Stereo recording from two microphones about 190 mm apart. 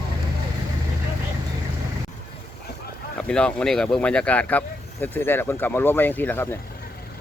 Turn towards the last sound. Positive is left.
turn(degrees=10)  # may be behind; listen again after turning